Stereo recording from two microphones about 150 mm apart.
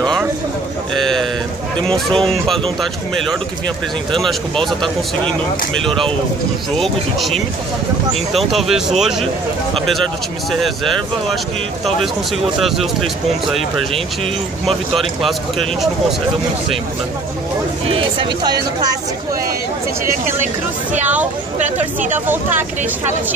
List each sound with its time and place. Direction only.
0.9 s a sound: 5° left (ahead or behind)
1.8 s speech: 5° left (ahead or behind)
5.8 s speech: 5° left (ahead or behind)
12.6 s speech: centre (ahead or behind)
15.0 s speech: centre (ahead or behind)
17.8 s speech: 30° right (ahead or behind)
21.5 s speech: 55° right (ahead or behind)
22.1 s speech: 15° right (ahead or behind)